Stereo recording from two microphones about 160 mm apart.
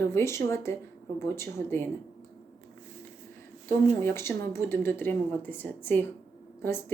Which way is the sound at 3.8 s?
15° left (ahead or behind).